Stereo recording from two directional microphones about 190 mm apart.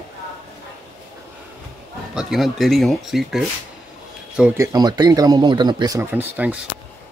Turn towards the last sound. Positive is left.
turn(degrees=-10)  # may be behind; listen again after turning